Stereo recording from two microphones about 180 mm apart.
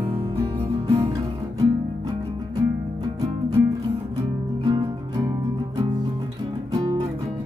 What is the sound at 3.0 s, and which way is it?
Music, 20° right (ahead or behind).